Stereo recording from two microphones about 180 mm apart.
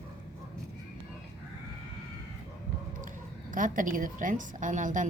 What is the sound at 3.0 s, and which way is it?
A woman's voice, 45° right (ahead or behind).